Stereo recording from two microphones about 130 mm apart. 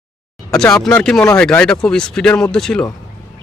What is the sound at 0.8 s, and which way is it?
Speech, 5° left (ahead or behind).